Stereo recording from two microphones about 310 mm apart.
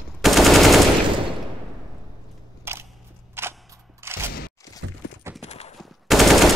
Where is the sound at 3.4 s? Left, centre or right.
Centre.